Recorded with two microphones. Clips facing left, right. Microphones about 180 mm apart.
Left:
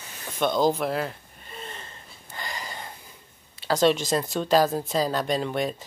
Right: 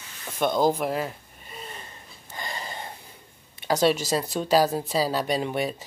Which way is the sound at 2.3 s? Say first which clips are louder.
Right 1 dB; 25° right (ahead or behind).